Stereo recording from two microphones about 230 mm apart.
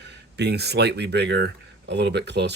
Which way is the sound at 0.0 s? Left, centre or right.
Right.